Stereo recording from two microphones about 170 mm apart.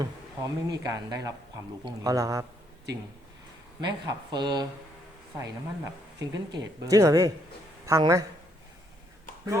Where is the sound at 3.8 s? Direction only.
25° right (ahead or behind).